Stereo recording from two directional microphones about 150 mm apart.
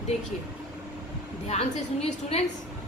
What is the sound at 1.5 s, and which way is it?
Speech, 45° left (ahead or behind).